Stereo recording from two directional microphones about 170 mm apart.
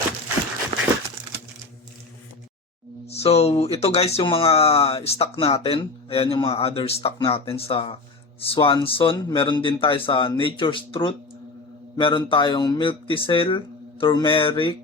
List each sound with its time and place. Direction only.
3.1 s speech: 35° left (ahead or behind)